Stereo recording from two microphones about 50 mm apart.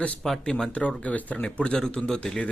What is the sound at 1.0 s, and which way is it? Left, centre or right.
A man's voice, left.